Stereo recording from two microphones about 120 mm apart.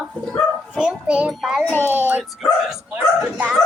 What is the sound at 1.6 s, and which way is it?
Speech, 15° left (ahead or behind).